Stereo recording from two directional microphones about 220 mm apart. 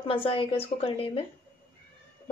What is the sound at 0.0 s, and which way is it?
Speech, 25° left (ahead or behind).